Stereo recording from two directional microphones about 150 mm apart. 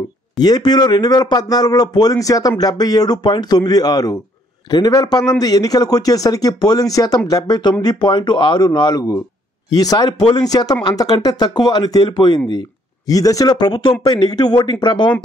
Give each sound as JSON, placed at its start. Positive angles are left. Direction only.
{"t": 0.4, "sound": "speech", "side_deg": 25}